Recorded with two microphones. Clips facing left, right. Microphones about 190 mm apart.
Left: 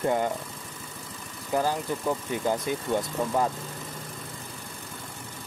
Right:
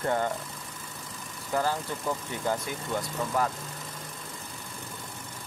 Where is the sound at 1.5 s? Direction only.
15° left (ahead or behind).